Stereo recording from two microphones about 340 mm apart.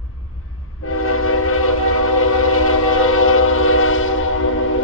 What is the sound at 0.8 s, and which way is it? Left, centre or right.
Train, left.